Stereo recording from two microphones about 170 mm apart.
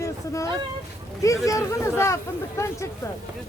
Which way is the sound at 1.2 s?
20° left (ahead or behind).